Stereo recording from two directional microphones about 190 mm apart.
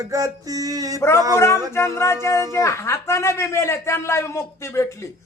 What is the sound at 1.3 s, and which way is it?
Speech, 15° left (ahead or behind).